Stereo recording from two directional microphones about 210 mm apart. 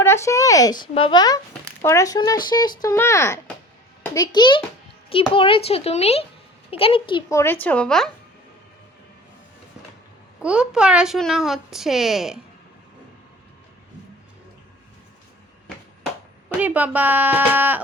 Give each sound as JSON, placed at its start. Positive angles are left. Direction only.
{"t": 0.0, "sound": "speech", "side_deg": 10}
{"t": 10.4, "sound": "speech", "side_deg": -5}
{"t": 16.6, "sound": "speech", "side_deg": -5}